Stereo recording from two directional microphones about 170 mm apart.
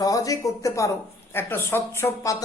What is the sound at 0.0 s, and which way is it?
Speech, 20° left (ahead or behind).